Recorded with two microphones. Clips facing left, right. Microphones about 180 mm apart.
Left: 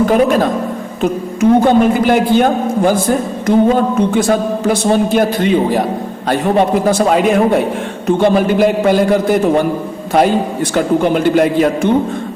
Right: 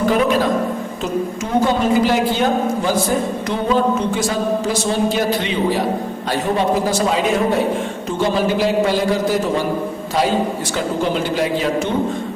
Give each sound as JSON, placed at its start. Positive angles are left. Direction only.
{"t": 0.1, "sound": "a man's voice", "side_deg": 50}
{"t": 10.8, "sound": "a man's voice", "side_deg": 55}